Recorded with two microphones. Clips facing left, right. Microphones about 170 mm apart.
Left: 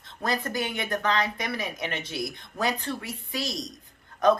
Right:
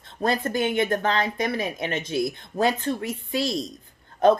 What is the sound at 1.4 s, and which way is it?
Speech, 50° right (ahead or behind).